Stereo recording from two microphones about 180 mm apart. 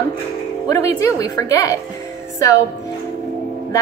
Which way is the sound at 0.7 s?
15° left (ahead or behind).